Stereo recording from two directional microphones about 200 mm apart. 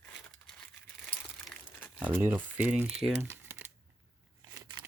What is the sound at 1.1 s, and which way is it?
Crumpling, 5° right (ahead or behind).